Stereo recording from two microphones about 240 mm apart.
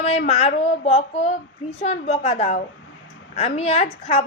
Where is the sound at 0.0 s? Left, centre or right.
Left.